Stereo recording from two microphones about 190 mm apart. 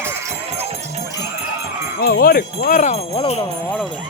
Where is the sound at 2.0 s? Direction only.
50° left (ahead or behind); by 3.4 s 35° left (ahead or behind).